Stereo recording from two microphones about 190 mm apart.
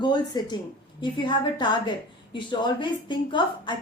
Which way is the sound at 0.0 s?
25° left (ahead or behind).